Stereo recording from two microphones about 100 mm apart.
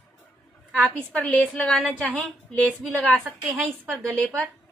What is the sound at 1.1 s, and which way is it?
Speech, 15° left (ahead or behind).